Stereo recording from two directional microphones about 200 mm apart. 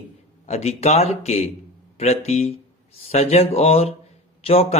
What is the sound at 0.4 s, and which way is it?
Speech, 30° left (ahead or behind).